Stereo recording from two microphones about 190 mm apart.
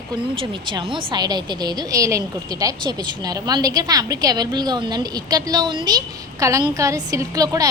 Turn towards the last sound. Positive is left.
turn(degrees=-20)  # may be behind; listen again after turning